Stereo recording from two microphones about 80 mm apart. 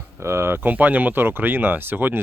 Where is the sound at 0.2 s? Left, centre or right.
Right.